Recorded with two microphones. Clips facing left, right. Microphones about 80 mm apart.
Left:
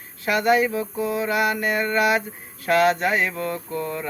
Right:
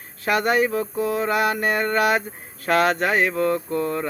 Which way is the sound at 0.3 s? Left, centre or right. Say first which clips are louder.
Even; right.